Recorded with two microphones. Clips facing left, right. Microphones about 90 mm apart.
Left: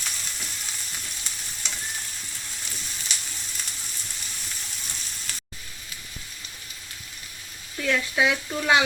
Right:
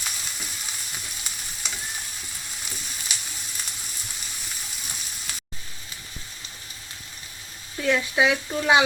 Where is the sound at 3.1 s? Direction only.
5° right (ahead or behind).